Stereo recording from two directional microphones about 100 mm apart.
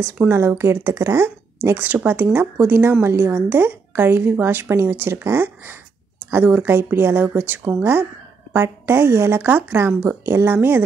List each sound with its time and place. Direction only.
0.0 s speech: 25° right (ahead or behind)